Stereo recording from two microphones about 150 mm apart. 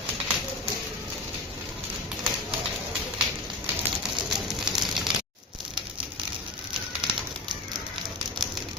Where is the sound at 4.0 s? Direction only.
Centre (ahead or behind).